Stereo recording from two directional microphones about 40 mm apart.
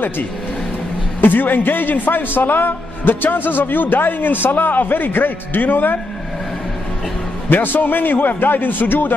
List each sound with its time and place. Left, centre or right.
1.2 s a man's voice: left
7.4 s a man's voice: left